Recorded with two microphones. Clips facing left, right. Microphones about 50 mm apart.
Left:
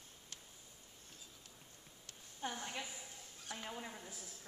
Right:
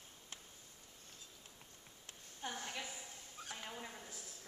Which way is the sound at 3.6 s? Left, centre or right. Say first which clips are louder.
Left 4 dB; centre.